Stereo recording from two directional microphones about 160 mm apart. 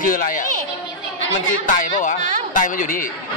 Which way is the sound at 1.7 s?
55° left (ahead or behind).